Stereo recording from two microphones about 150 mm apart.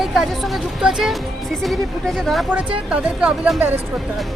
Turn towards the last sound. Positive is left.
turn(degrees=-5)  # may be behind; listen again after turning